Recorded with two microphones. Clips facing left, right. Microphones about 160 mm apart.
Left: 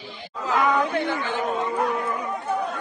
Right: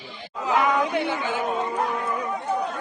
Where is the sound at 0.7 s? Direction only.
15° right (ahead or behind).